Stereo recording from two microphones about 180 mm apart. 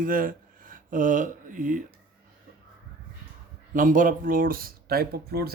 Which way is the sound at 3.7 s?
45° right (ahead or behind).